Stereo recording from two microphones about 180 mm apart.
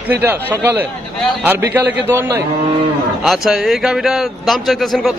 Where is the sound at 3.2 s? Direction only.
Centre (ahead or behind).